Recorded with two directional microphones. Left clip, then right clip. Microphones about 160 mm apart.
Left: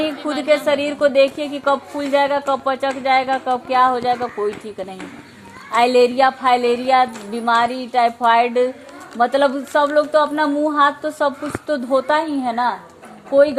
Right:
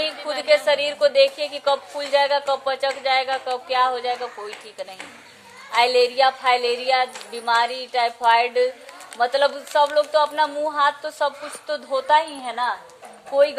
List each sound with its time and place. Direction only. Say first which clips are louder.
0.4 s speech: left 1 dB; 35° left (ahead or behind)
3.8 s a woman's voice: left 5 dB; 45° left (ahead or behind)
5.7 s a woman's voice: left 4 dB; 50° left (ahead or behind)